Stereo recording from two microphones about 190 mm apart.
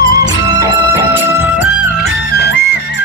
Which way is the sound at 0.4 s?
20° right (ahead or behind).